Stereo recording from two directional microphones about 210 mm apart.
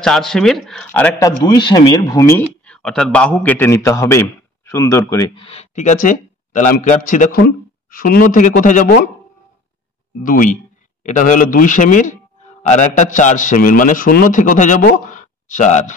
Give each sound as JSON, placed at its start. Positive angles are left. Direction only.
{"t": 0.0, "sound": "speech", "side_deg": 0}
{"t": 1.4, "sound": "speech", "side_deg": 20}
{"t": 10.2, "sound": "a man's voice", "side_deg": 40}